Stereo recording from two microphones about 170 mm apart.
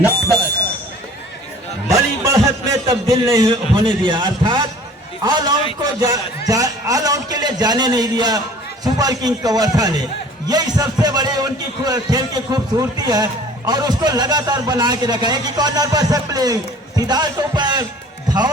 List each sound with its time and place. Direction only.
1.9 s a man's voice: 20° right (ahead or behind)